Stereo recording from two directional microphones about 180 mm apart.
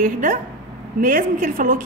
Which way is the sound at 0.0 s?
45° right (ahead or behind).